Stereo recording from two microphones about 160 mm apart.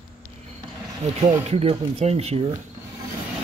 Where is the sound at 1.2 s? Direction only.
45° right (ahead or behind).